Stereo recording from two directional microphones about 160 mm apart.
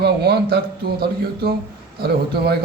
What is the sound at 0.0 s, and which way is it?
Speech, 85° right.